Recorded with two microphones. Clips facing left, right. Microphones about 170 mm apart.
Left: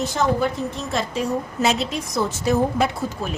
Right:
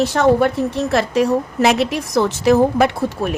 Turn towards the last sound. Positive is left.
turn(degrees=-65)  # may be behind; listen again after turning